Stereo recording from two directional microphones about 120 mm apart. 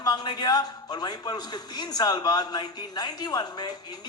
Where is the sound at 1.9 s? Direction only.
35° left (ahead or behind).